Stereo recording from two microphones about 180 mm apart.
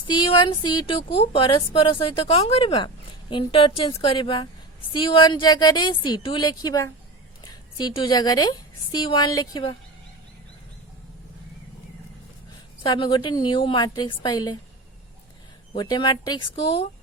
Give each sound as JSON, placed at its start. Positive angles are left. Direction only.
{"t": 0.1, "sound": "a woman's voice", "side_deg": 25}
{"t": 12.8, "sound": "a woman's voice", "side_deg": 25}
{"t": 15.7, "sound": "a woman's voice", "side_deg": 25}